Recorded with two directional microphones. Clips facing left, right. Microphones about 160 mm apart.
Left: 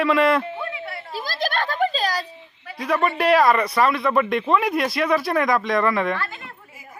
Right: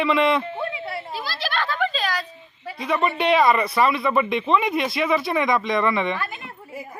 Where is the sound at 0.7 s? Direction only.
25° right (ahead or behind).